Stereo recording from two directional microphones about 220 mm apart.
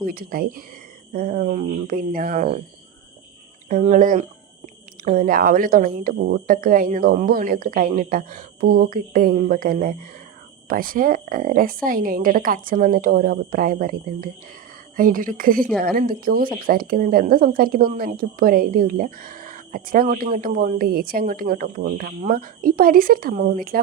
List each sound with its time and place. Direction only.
0.0 s speech: 40° right (ahead or behind)
3.7 s speech: 35° right (ahead or behind)